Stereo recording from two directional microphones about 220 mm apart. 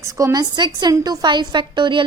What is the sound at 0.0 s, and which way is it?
A woman's voice, 15° right (ahead or behind).